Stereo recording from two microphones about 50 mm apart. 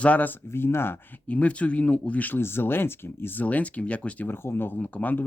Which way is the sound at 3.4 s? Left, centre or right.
Left.